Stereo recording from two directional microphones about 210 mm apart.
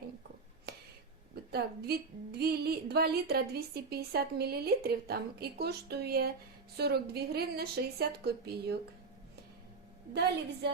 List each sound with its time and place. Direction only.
0.7 s a sound: 50° right (ahead or behind)
1.5 s a woman's voice: 50° right (ahead or behind)
10.1 s a woman's voice: 50° right (ahead or behind)